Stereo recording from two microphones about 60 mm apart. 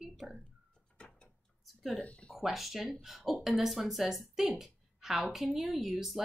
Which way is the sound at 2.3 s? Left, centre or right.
Centre.